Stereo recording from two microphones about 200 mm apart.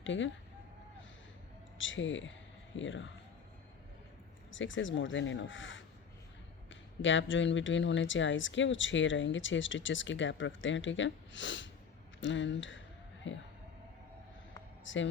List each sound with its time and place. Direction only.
0.0 s speech: 70° left (ahead or behind)
1.8 s speech: 70° left (ahead or behind)
4.5 s speech: 70° left (ahead or behind)
7.0 s speech: 70° left (ahead or behind)
13.2 s a sound: 65° left (ahead or behind)
14.9 s speech: 70° left (ahead or behind)